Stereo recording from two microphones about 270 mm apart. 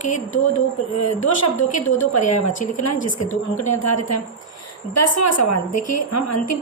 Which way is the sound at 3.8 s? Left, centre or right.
Left.